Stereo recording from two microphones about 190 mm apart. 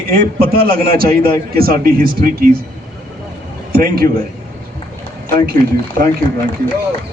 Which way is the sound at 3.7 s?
50° right (ahead or behind).